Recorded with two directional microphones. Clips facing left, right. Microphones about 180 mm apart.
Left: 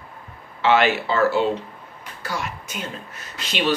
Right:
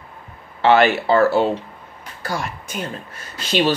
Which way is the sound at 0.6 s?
45° right (ahead or behind).